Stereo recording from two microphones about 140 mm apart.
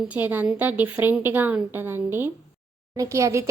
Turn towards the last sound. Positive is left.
turn(degrees=-20)  # may be behind; listen again after turning